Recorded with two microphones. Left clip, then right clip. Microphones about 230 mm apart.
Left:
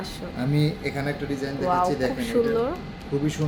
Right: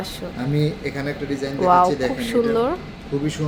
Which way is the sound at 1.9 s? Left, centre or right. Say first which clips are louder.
Right 3 dB; centre.